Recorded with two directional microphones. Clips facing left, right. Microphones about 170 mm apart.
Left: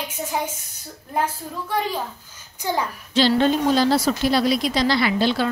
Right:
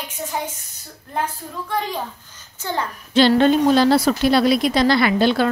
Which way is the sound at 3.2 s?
55° right (ahead or behind).